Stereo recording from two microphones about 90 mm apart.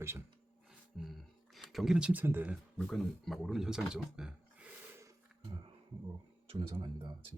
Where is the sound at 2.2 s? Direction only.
25° right (ahead or behind).